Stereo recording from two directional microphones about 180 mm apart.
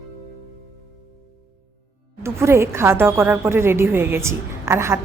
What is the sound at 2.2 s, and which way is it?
A woman's voice, 15° right (ahead or behind).